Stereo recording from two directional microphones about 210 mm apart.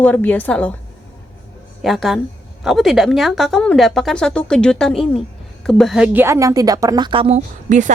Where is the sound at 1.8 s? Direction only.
Centre (ahead or behind); by 7.9 s 35° right (ahead or behind).